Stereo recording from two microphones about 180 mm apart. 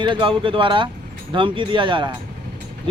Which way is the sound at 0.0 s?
25° right (ahead or behind).